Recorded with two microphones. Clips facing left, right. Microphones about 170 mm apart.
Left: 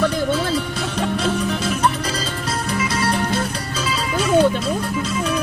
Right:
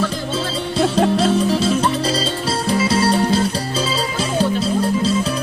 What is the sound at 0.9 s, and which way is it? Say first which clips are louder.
Music: right 4 dB; 30° right (ahead or behind).